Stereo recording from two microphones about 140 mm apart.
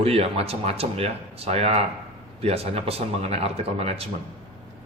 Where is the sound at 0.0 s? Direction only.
45° right (ahead or behind).